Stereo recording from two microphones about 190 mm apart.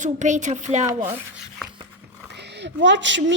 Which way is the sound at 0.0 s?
40° right (ahead or behind).